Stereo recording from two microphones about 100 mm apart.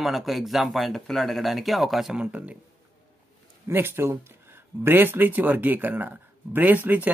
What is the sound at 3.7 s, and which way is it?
A man's voice, 25° right (ahead or behind).